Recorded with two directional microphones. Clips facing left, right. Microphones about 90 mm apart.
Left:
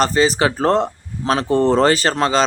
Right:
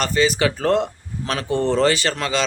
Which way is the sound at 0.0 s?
35° left (ahead or behind).